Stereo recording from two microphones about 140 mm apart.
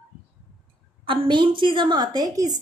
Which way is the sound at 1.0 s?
40° right (ahead or behind).